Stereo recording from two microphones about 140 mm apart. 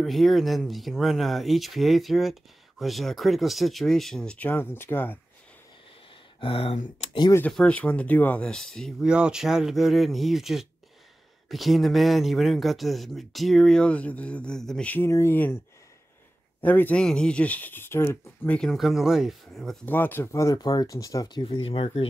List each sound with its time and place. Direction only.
0.0 s speech: centre (ahead or behind)
6.4 s speech: 40° left (ahead or behind)
7.5 s speech: 10° left (ahead or behind)
15.0 s speech: 20° left (ahead or behind)
16.6 s speech: 10° left (ahead or behind)
18.6 s speech: centre (ahead or behind)
19.9 s speech: 15° left (ahead or behind); by 22.0 s 45° left (ahead or behind)